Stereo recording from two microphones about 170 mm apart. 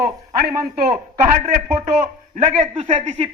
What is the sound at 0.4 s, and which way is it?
A man's voice, 55° right (ahead or behind).